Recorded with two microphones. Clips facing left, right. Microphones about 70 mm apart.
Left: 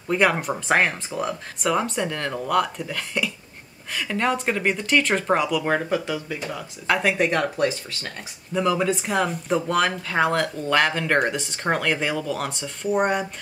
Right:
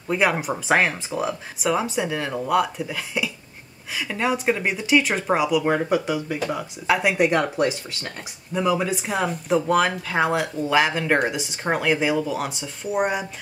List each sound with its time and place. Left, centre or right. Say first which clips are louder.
0.1 s speech: left 1 dB; centre
8.5 s speech: even; centre